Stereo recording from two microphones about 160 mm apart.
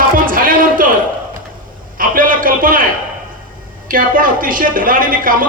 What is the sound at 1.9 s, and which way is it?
Speech, 60° right (ahead or behind).